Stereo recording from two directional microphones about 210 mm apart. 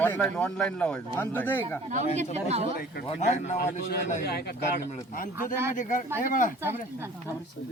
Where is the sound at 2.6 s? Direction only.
45° left (ahead or behind).